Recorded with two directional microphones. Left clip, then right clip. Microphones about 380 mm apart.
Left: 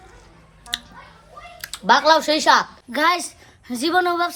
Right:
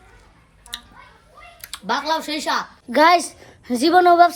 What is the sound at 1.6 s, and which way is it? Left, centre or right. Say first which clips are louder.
A woman's voice: left 8 dB; centre.